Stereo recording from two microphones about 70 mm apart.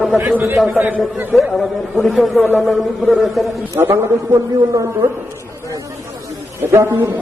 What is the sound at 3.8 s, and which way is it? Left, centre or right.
Music, right.